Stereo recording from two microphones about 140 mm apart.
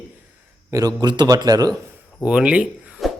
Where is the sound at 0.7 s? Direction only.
25° right (ahead or behind).